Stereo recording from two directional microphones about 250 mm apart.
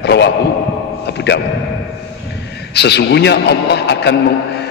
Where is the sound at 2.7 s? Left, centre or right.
Left.